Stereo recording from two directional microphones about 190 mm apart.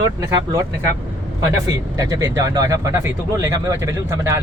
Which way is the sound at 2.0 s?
20° right (ahead or behind).